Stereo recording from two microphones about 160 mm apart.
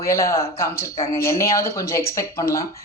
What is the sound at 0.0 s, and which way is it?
A woman's voice, 20° left (ahead or behind).